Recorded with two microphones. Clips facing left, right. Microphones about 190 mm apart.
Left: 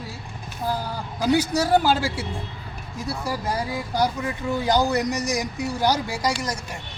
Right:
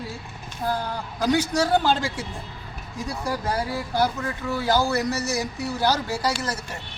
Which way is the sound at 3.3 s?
15° left (ahead or behind).